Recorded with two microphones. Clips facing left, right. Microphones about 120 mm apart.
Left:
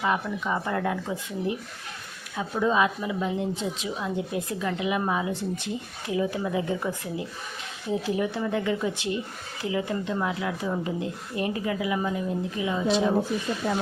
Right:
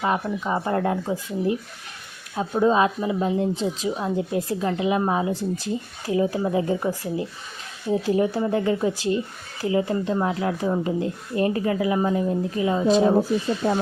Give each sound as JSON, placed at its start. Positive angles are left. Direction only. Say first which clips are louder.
{"t": 0.0, "sound": "speech", "louder": "right 3 dB", "side_deg": -30}